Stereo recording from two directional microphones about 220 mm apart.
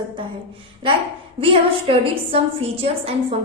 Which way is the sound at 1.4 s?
25° right (ahead or behind).